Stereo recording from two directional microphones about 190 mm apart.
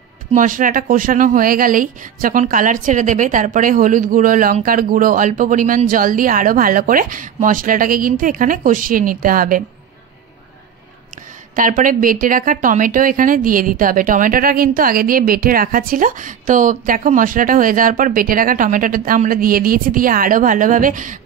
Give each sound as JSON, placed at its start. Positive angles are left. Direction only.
{"t": 0.3, "sound": "speech", "side_deg": -45}
{"t": 11.5, "sound": "speech", "side_deg": -45}